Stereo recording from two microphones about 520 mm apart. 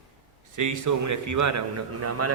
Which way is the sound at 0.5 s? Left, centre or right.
Right.